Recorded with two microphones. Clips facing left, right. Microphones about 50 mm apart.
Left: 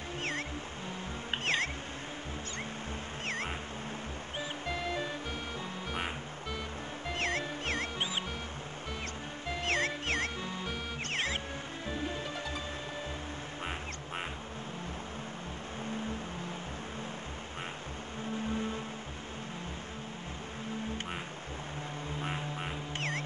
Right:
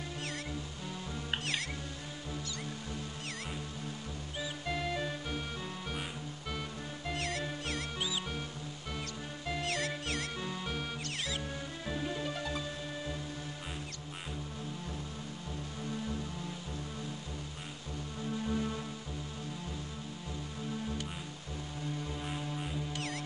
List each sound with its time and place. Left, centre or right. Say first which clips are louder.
1.4 s music: left 5 dB; left
4.6 s music: even; centre
7.2 s music: left 4 dB; left
9.6 s music: left 5 dB; left
12.2 s music: right 1 dB; centre
22.3 s music: left 1 dB; left